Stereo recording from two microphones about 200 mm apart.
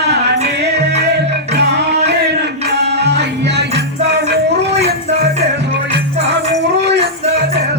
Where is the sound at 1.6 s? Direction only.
55° right (ahead or behind).